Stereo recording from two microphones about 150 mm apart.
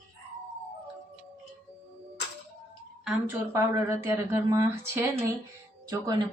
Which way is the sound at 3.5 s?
20° right (ahead or behind).